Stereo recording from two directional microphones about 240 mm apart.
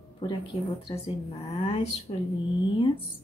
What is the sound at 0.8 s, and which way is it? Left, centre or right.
Speech, left.